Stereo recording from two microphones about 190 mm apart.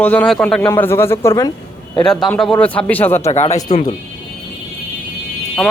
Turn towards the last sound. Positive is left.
turn(degrees=5)  # may be behind; listen again after turning